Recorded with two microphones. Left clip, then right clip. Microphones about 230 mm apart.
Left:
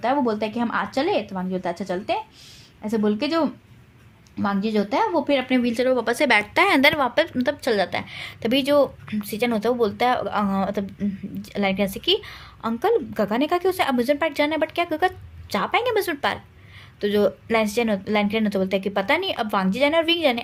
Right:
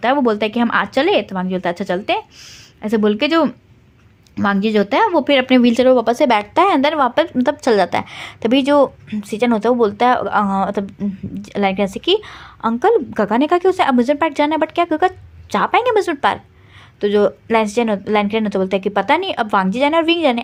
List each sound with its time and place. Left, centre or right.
0.0 s a woman's voice: right; by 20.4 s centre